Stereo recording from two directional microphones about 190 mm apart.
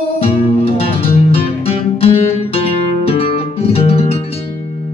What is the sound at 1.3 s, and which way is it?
Music, 30° left (ahead or behind).